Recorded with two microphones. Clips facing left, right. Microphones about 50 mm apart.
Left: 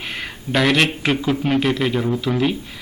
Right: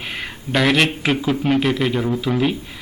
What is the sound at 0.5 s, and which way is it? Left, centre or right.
Speech, centre.